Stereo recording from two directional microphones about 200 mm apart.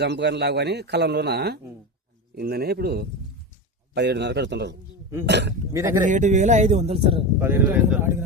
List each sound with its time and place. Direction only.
0.0 s a man's voice: 60° right (ahead or behind)
6.1 s speech: 40° right (ahead or behind)
7.3 s speech: 10° right (ahead or behind)